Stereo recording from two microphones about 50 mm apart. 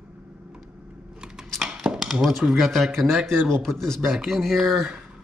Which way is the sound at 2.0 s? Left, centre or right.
Centre.